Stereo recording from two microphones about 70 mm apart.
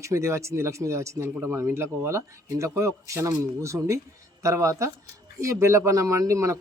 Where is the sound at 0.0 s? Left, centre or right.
Right.